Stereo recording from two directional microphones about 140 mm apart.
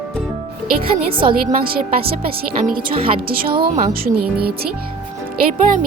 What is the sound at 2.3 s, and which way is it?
Speech, 85° right.